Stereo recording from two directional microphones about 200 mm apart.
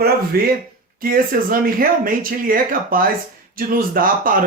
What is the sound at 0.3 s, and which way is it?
Speech, 50° right (ahead or behind).